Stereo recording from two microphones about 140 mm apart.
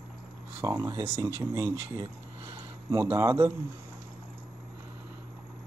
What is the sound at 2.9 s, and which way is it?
Speech, 20° right (ahead or behind).